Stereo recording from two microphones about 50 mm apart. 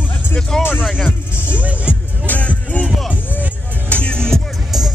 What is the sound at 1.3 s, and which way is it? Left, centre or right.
Music, left.